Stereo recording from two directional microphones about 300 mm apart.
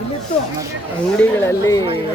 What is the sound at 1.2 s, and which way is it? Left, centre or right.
Speech, centre.